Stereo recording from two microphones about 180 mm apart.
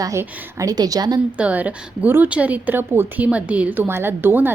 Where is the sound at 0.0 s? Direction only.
15° right (ahead or behind).